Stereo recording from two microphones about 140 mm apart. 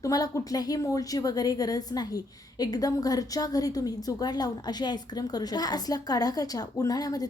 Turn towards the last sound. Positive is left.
turn(degrees=25)  # may be behind; listen again after turning